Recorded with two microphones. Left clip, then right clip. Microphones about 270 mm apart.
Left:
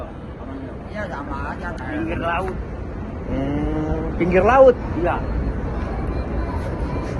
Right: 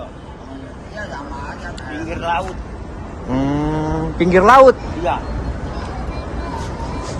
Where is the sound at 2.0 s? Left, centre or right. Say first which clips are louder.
Right 3 dB; right.